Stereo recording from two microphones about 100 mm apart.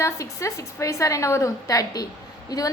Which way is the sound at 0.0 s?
30° left (ahead or behind).